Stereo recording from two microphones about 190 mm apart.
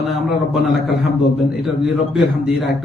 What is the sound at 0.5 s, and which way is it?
Speech, 65° left (ahead or behind).